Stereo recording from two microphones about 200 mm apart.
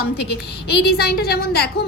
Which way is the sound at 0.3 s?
55° left (ahead or behind).